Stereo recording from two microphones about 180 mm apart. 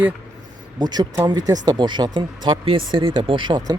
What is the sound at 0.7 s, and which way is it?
Speech, 25° right (ahead or behind).